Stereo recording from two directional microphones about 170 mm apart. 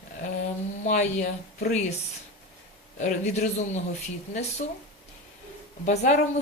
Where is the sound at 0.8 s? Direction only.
45° left (ahead or behind).